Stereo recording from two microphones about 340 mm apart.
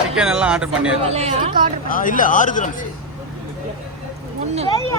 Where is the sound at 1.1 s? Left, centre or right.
Centre.